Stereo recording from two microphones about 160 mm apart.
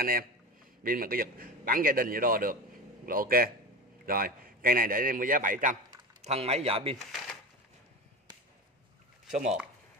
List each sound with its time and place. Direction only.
0.0 s a man's voice: 65° right (ahead or behind)
6.2 s speech: 40° right (ahead or behind)
9.3 s speech: 45° right (ahead or behind)